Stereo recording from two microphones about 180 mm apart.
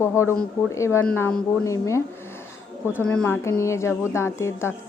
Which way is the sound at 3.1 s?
10° left (ahead or behind).